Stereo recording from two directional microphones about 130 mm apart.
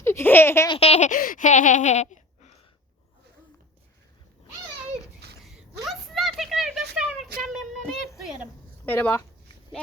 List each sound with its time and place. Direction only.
0.0 s speech: 20° left (ahead or behind)
0.8 s baby laughter: 55° left (ahead or behind)
5.8 s a sound: centre (ahead or behind)
8.9 s speech: 15° left (ahead or behind)